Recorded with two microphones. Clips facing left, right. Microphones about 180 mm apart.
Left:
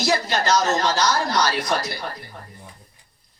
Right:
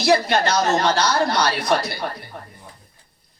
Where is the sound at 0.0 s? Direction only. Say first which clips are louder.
Right 4 dB; 60° right (ahead or behind).